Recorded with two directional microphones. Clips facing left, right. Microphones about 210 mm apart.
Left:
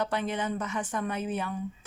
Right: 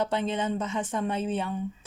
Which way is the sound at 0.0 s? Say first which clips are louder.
Right 2 dB; 25° right (ahead or behind).